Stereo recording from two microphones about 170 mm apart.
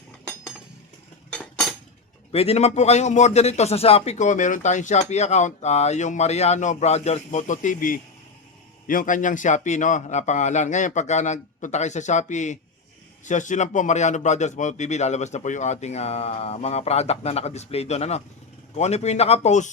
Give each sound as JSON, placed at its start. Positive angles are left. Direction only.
{"t": 1.3, "sound": "cutlery", "side_deg": 5}
{"t": 2.3, "sound": "a man's voice", "side_deg": 35}